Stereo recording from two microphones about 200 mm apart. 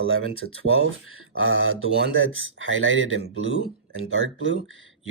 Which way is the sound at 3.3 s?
90° left.